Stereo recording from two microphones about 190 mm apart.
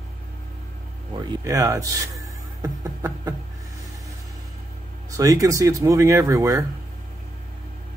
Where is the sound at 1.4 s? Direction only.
15° right (ahead or behind).